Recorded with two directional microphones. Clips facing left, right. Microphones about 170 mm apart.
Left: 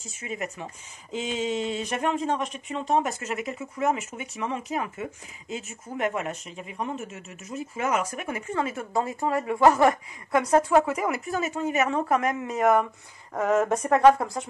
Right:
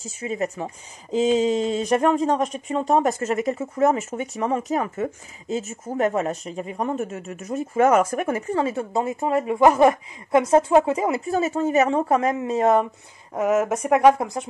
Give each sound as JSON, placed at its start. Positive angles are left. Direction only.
{"t": 0.0, "sound": "speech", "side_deg": -30}
{"t": 13.3, "sound": "speech", "side_deg": -10}